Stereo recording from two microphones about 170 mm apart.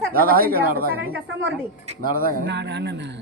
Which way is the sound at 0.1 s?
60° right (ahead or behind).